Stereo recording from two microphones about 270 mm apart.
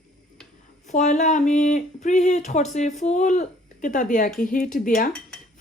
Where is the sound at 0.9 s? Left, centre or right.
Left.